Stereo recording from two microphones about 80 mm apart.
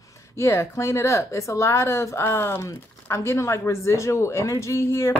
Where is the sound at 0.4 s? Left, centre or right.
Left.